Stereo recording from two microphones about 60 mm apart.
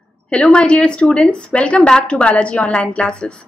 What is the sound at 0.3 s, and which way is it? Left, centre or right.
A woman's voice, centre.